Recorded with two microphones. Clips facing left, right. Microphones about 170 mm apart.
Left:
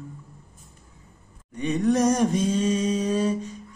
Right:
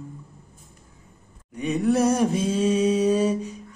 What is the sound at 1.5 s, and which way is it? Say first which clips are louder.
Mantra: even; 5° right (ahead or behind).